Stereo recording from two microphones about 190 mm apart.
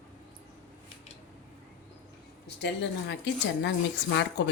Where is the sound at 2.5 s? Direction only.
65° left (ahead or behind).